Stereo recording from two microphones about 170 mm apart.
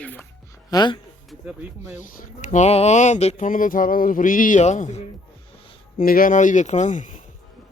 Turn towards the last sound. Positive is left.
turn(degrees=45)  # may be behind; listen again after turning